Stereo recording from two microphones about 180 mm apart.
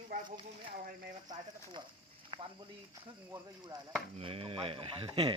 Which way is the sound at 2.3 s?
30° right (ahead or behind).